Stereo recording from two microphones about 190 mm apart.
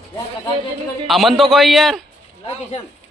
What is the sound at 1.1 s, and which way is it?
Speech, centre (ahead or behind).